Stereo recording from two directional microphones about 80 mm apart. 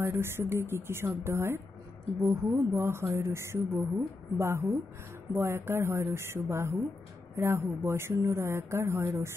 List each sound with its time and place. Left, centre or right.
0.0 s speech: right